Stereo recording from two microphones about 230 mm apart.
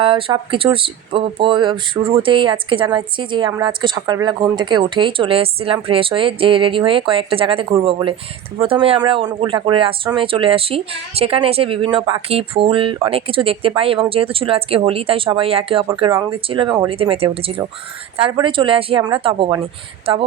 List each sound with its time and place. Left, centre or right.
0.0 s speech: right